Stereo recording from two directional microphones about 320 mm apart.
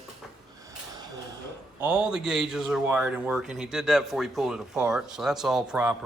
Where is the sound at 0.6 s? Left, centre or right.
Centre.